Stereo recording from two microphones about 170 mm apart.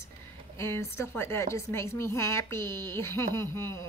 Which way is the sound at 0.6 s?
15° left (ahead or behind).